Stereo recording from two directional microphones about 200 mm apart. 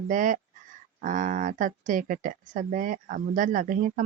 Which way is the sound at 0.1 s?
40° right (ahead or behind).